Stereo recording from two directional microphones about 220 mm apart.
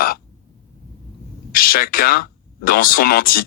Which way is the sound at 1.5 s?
40° left (ahead or behind).